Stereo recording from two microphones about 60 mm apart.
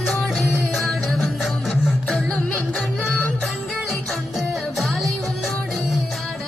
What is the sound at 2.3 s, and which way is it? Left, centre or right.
Music, left.